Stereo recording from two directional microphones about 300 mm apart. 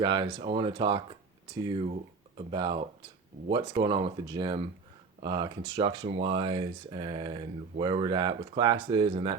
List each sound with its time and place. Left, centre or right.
0.0 s speech: centre